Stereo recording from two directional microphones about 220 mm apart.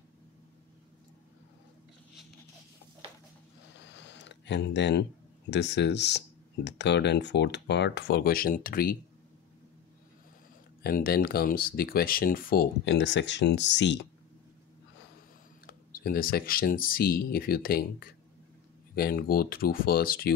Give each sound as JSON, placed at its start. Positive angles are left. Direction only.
{"t": 3.8, "sound": "a sound", "side_deg": 55}
{"t": 5.5, "sound": "speech", "side_deg": 50}
{"t": 10.8, "sound": "speech", "side_deg": 40}
{"t": 15.6, "sound": "speech", "side_deg": 40}